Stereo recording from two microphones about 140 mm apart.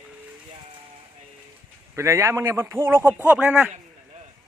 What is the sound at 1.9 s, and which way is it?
A man's voice, 20° right (ahead or behind).